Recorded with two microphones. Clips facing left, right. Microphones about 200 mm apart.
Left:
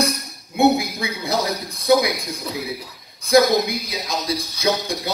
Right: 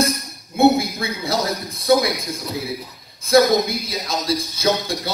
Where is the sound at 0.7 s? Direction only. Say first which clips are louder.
Right 2 dB; 15° left (ahead or behind).